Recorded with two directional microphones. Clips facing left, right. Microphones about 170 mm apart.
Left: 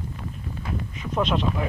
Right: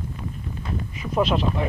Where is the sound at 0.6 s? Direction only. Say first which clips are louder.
Right 1 dB; 5° right (ahead or behind).